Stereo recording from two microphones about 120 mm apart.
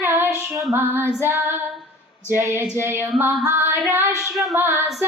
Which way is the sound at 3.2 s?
15° right (ahead or behind).